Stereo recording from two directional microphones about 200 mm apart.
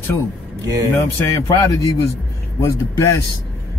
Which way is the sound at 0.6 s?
15° right (ahead or behind).